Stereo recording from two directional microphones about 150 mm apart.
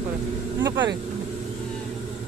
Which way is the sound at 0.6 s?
30° right (ahead or behind).